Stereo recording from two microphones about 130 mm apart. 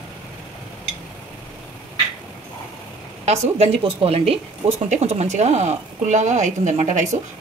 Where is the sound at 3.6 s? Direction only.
45° right (ahead or behind).